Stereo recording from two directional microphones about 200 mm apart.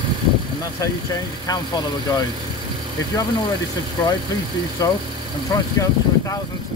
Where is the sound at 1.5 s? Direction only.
20° left (ahead or behind).